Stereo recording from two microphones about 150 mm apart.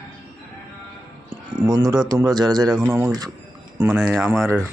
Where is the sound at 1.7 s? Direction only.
25° right (ahead or behind).